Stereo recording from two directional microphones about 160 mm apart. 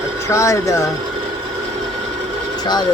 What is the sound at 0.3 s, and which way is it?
Speech, 20° left (ahead or behind).